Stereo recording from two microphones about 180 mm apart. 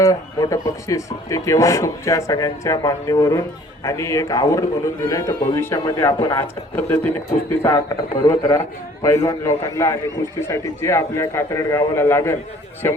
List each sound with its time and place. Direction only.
0.0 s speech: 20° left (ahead or behind)